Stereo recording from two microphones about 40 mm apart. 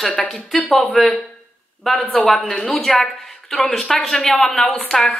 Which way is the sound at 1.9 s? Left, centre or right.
Centre.